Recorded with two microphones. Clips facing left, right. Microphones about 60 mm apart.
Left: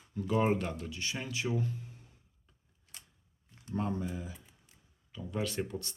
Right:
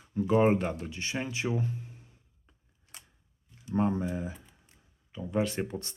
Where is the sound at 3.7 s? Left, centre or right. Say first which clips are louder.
Right 6 dB; right.